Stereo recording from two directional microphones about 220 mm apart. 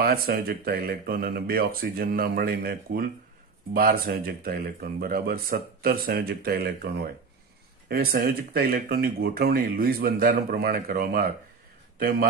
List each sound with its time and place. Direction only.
0.0 s speech: 45° right (ahead or behind)
7.9 s a man's voice: 40° right (ahead or behind)